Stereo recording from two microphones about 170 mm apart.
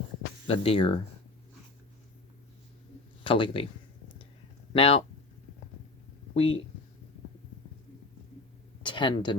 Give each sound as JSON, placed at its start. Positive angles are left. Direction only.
{"t": 0.4, "sound": "speech", "side_deg": 35}
{"t": 3.2, "sound": "speech", "side_deg": 30}
{"t": 4.7, "sound": "speech", "side_deg": 35}
{"t": 6.3, "sound": "speech", "side_deg": 35}
{"t": 8.8, "sound": "a sound", "side_deg": 30}